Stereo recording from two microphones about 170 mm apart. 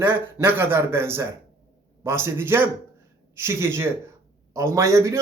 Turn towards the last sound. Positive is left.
turn(degrees=-20)  # may be behind; listen again after turning